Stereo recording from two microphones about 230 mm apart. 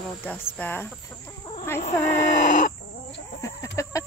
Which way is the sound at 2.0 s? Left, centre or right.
Left.